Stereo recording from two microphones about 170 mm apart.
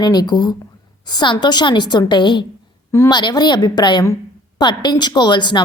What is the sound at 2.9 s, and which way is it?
Speech, 15° left (ahead or behind).